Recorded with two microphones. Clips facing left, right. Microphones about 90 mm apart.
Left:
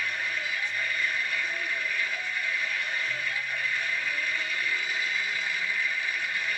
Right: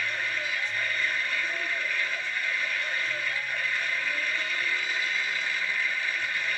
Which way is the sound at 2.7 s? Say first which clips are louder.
Right 1 dB; 15° left (ahead or behind).